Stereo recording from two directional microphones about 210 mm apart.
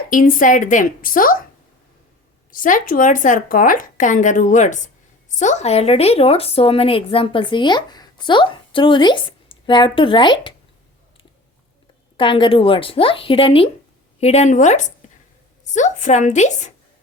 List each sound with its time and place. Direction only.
0.1 s speech: 40° left (ahead or behind)
2.5 s speech: 40° left (ahead or behind); by 10.5 s 20° left (ahead or behind)
12.1 s speech: 25° left (ahead or behind)